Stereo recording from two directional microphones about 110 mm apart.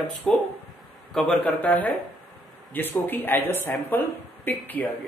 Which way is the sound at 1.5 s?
15° left (ahead or behind).